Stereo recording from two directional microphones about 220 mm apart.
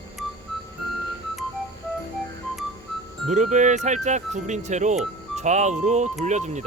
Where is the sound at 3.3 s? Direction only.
35° right (ahead or behind).